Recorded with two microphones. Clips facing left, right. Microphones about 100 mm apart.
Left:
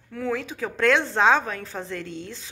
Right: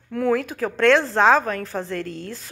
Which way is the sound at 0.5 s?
5° left (ahead or behind).